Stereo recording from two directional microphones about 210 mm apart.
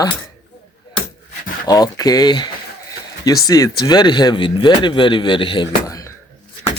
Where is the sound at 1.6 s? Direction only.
20° left (ahead or behind).